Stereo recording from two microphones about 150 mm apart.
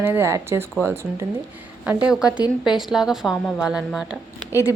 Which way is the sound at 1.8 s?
5° right (ahead or behind).